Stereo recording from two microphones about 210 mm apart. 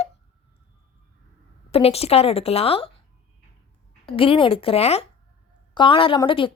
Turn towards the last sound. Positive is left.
turn(degrees=25)  # may be behind; listen again after turning